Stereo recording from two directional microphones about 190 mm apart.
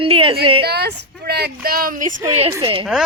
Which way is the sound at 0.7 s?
60° right (ahead or behind).